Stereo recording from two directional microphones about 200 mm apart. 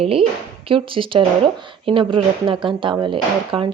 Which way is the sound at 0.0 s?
25° right (ahead or behind).